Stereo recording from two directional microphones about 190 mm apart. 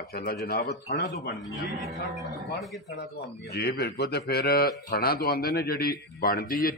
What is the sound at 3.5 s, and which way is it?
A man's voice, 55° left (ahead or behind).